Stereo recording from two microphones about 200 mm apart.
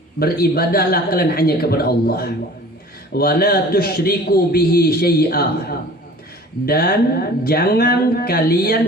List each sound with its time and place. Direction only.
0.2 s a man's voice: 50° left (ahead or behind)